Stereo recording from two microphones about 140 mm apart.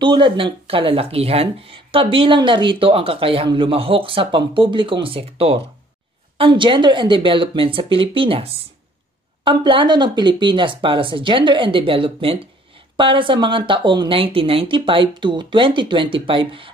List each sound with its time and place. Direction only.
0.0 s speech: 35° right (ahead or behind)